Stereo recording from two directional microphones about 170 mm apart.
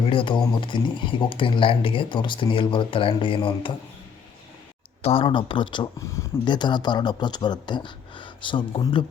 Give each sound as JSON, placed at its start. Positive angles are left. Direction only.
{"t": 0.0, "sound": "speech", "side_deg": 30}
{"t": 5.0, "sound": "speech", "side_deg": 30}